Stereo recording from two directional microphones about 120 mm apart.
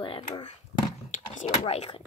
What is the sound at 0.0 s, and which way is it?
Speech, 50° left (ahead or behind).